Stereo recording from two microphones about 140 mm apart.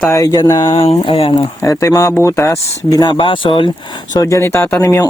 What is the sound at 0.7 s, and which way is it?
Speech, 40° left (ahead or behind).